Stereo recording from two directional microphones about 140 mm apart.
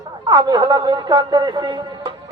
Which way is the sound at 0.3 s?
30° right (ahead or behind).